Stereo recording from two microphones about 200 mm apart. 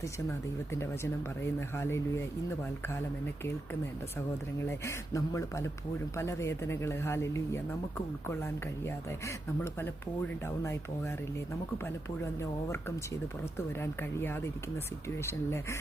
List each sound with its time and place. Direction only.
0.3 s speech: 15° left (ahead or behind)
4.6 s speech: 15° left (ahead or behind)
12.2 s speech: 15° left (ahead or behind)
13.8 s speech: 10° left (ahead or behind)